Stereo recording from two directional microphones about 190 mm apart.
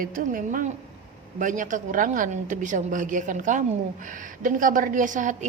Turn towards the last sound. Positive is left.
turn(degrees=-40)  # may be behind; listen again after turning